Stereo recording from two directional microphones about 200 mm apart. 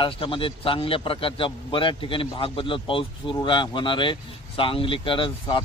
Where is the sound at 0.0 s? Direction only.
25° left (ahead or behind).